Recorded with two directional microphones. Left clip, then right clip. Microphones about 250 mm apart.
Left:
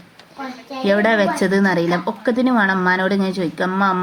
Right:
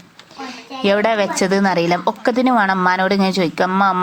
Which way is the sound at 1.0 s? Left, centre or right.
Right.